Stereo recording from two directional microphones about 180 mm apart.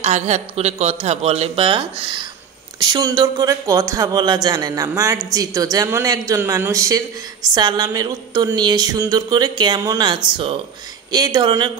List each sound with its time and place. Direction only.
0.0 s speech: 40° right (ahead or behind)